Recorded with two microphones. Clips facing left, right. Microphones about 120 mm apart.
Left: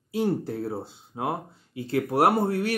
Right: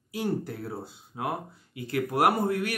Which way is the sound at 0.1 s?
25° left (ahead or behind).